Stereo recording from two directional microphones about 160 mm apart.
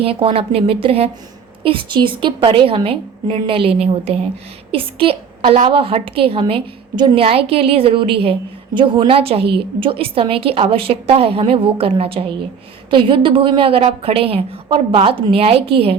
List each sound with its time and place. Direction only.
0.0 s a woman's voice: 35° right (ahead or behind)